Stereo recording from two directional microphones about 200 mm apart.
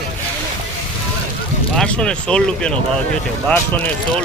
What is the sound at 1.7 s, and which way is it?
Speech, 5° left (ahead or behind).